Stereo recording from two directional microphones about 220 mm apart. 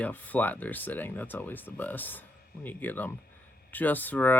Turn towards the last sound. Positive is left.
turn(degrees=10)  # may be behind; listen again after turning